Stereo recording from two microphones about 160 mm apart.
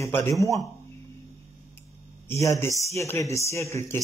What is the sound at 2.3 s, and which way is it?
Speech, 15° left (ahead or behind).